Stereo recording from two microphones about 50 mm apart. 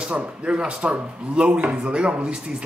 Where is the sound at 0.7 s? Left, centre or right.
Right.